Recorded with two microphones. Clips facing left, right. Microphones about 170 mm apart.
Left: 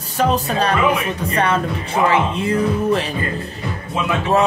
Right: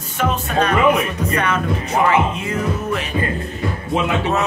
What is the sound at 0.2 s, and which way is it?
Speech, 35° left (ahead or behind).